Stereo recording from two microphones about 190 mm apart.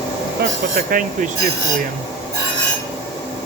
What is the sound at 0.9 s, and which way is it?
Speech, 45° right (ahead or behind).